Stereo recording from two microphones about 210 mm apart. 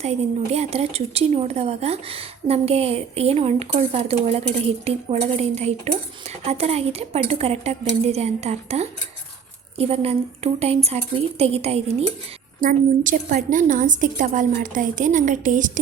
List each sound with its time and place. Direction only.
0.0 s a woman's voice: 30° right (ahead or behind)